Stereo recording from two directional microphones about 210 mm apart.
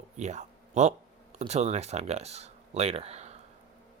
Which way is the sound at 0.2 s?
35° right (ahead or behind).